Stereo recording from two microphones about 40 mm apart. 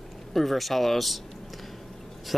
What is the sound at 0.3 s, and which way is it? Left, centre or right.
Speech, centre.